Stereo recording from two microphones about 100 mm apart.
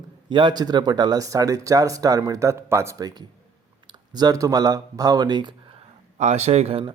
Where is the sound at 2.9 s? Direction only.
40° right (ahead or behind).